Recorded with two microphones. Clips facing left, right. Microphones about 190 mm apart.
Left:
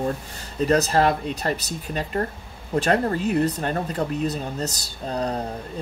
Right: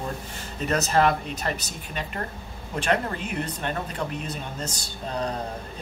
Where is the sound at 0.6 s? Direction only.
35° left (ahead or behind).